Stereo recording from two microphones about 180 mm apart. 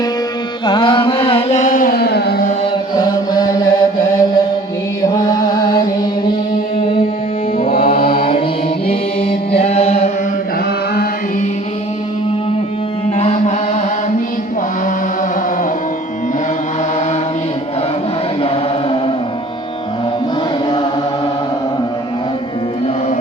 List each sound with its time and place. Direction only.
0.6 s carnatic music: 25° left (ahead or behind); by 2.5 s 60° left (ahead or behind)
2.9 s chant: 20° left (ahead or behind)
5.0 s mantra: 20° left (ahead or behind)
5.5 s music: 20° left (ahead or behind)
7.6 s mantra: 55° left (ahead or behind)
8.2 s mantra: 30° left (ahead or behind)
9.6 s music: 35° left (ahead or behind)
13.1 s music: 40° left (ahead or behind)
18.4 s chant: 30° left (ahead or behind)